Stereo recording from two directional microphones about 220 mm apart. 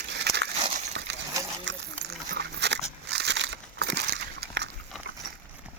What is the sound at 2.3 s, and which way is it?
Dog, 50° right (ahead or behind).